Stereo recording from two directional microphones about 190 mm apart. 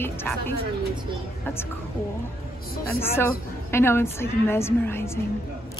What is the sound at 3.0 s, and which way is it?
A woman's voice, 10° left (ahead or behind).